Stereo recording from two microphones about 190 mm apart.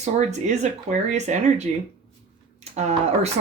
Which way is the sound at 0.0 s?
35° right (ahead or behind).